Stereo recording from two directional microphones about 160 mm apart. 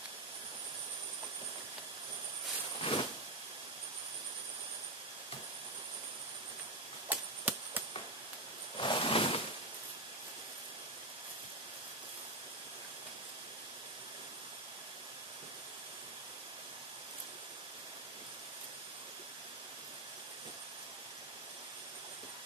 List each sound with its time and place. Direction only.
2.8 s vehicle: 35° left (ahead or behind)
7.1 s chop: 10° right (ahead or behind)
8.7 s a sound: 30° left (ahead or behind)